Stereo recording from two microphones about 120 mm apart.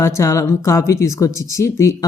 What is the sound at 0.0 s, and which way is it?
Speech, 25° left (ahead or behind).